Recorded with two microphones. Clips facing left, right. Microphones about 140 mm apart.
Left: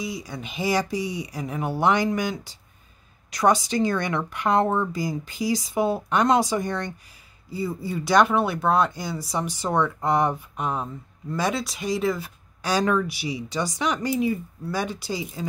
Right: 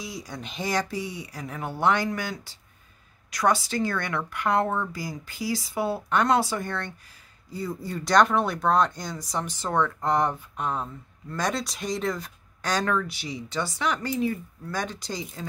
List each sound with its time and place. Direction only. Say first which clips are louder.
0.0 s a woman's voice: left 4 dB; centre (ahead or behind)